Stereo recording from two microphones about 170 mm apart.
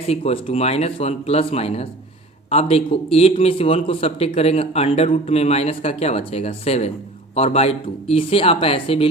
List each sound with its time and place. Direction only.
0.1 s a man's voice: 35° left (ahead or behind)